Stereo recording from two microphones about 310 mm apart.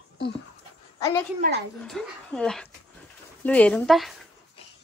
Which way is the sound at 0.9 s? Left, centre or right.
Centre.